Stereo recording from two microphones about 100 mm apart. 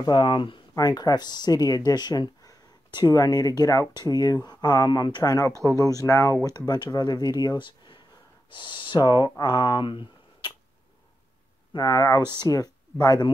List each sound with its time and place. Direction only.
0.0 s speech: 50° left (ahead or behind)
0.7 s speech: 40° left (ahead or behind)
5.5 s speech: 30° right (ahead or behind)
5.9 s speech: 35° left (ahead or behind); by 10.5 s 50° left (ahead or behind)
11.7 s speech: 40° left (ahead or behind)